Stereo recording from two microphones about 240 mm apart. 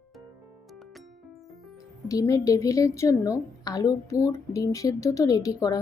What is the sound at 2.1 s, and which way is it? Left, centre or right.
A woman's voice, centre.